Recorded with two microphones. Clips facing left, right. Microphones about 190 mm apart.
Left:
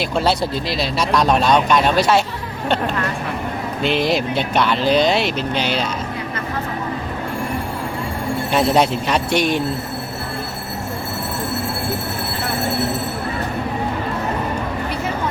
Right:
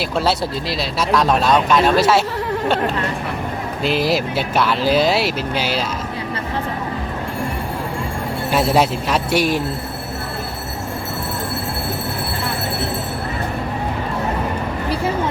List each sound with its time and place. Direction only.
0.0 s speech: centre (ahead or behind)
3.8 s speech: centre (ahead or behind)
8.5 s speech: 5° right (ahead or behind)